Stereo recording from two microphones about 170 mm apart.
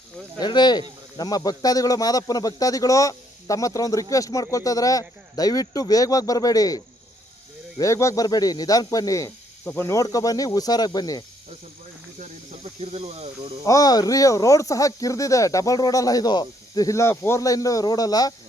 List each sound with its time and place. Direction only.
0.3 s speech: 25° left (ahead or behind)
12.8 s speech: 40° right (ahead or behind)
13.7 s speech: 20° left (ahead or behind)